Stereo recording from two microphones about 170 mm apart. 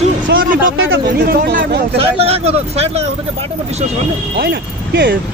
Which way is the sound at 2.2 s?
35° right (ahead or behind).